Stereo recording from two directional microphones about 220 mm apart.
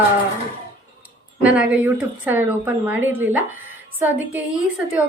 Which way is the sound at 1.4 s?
5° right (ahead or behind).